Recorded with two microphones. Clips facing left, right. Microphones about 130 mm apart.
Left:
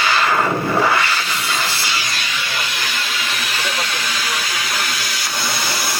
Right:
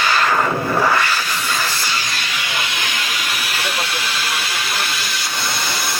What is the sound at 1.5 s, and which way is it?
Music, 15° left (ahead or behind).